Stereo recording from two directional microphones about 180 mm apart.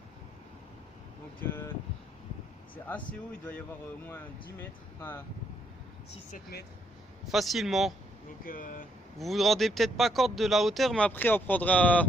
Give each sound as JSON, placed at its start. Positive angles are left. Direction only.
{"t": 1.4, "sound": "speech", "side_deg": 10}
{"t": 2.7, "sound": "speech", "side_deg": 10}
{"t": 6.3, "sound": "speech", "side_deg": 60}
{"t": 7.3, "sound": "speech", "side_deg": 0}
{"t": 8.4, "sound": "speech", "side_deg": 50}
{"t": 9.1, "sound": "speech", "side_deg": 0}